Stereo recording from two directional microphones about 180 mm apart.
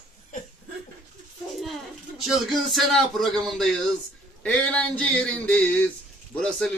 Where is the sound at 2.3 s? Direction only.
Centre (ahead or behind).